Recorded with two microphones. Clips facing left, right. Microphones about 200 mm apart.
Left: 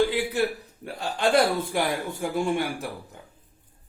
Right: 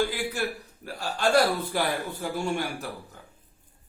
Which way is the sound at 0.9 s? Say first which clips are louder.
Left 2 dB; 20° left (ahead or behind).